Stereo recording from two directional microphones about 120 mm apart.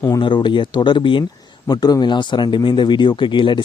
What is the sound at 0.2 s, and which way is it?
Speech, 40° left (ahead or behind).